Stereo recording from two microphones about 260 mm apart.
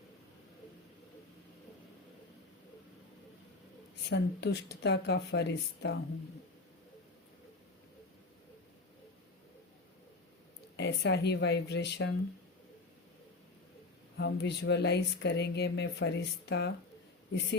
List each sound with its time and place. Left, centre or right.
4.1 s speech: left
10.8 s speech: left
14.2 s speech: left